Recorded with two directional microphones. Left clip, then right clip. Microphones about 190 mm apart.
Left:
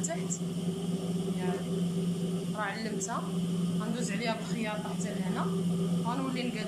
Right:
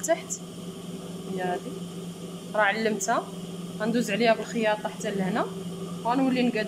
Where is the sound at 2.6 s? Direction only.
50° right (ahead or behind).